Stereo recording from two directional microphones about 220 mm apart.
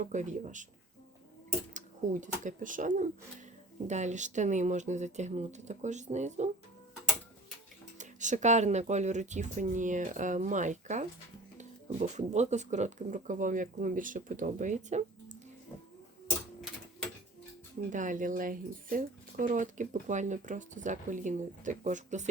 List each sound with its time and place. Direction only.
0.0 s speech: 35° right (ahead or behind)
2.2 s speech: 35° right (ahead or behind)
7.9 s speech: 35° right (ahead or behind)
16.2 s typewriter: centre (ahead or behind)
17.9 s speech: 35° right (ahead or behind)